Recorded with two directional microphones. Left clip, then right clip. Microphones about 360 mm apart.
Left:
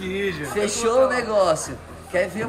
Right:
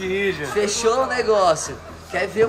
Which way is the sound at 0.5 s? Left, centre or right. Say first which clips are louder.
Even; centre.